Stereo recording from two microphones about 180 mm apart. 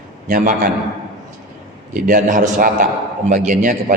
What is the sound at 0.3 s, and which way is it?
Speech, 50° right (ahead or behind).